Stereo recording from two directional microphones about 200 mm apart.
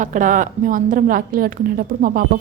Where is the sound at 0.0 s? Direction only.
40° right (ahead or behind).